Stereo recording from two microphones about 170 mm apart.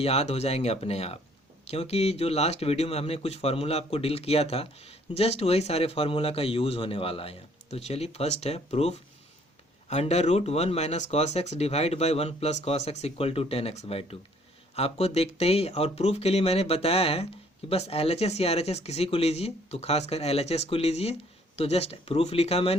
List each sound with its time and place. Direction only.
0.0 s speech: 35° left (ahead or behind)